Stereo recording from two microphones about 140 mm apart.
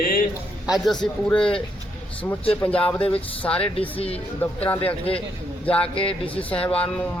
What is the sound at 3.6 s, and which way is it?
Speech, 45° left (ahead or behind).